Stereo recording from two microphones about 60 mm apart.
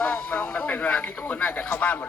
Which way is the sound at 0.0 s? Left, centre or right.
Centre.